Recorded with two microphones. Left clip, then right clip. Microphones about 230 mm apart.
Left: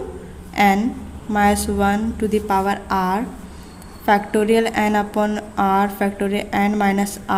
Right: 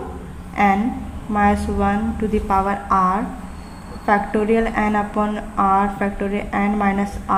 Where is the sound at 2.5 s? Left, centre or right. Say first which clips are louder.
Right 4 dB; left.